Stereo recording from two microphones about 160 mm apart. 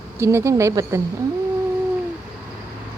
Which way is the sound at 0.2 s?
15° right (ahead or behind).